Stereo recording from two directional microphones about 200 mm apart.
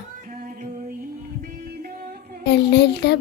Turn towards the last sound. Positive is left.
turn(degrees=55)  # may be behind; listen again after turning